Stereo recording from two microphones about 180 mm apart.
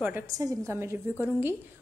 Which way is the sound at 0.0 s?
15° right (ahead or behind).